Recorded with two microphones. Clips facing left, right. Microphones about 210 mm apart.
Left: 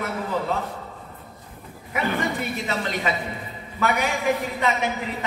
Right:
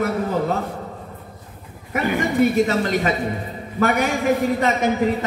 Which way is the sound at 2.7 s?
45° right (ahead or behind).